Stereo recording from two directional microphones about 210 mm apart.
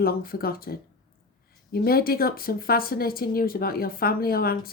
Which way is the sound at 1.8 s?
45° left (ahead or behind).